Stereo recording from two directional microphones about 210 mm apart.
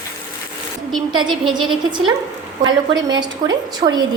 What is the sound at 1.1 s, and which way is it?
A woman's voice, 20° right (ahead or behind).